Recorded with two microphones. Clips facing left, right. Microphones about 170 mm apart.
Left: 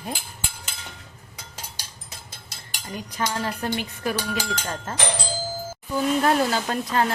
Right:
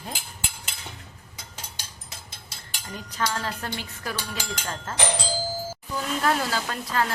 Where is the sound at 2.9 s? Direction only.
10° left (ahead or behind).